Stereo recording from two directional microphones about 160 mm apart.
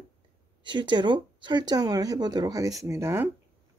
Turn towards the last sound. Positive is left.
turn(degrees=-15)  # may be behind; listen again after turning